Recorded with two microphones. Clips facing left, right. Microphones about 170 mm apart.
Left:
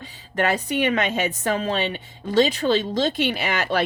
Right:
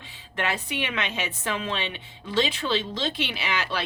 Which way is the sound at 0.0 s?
45° left (ahead or behind).